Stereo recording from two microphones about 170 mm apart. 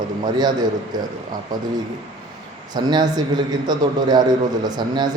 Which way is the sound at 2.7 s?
25° right (ahead or behind).